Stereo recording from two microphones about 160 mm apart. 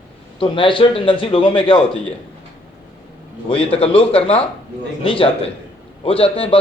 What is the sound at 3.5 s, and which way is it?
A man's voice, 40° left (ahead or behind).